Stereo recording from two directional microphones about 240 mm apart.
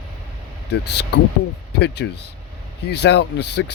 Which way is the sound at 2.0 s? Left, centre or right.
Left.